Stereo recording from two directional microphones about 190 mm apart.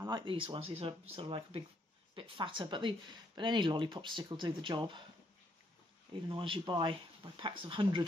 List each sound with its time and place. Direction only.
0.0 s speech: 25° right (ahead or behind)
6.2 s speech: 25° right (ahead or behind)